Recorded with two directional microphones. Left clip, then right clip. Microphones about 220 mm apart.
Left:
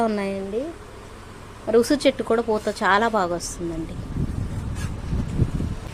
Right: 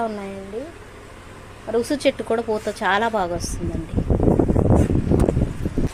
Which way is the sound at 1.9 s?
10° left (ahead or behind).